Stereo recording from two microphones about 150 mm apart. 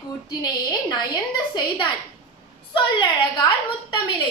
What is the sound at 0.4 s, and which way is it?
A woman's voice, 25° left (ahead or behind).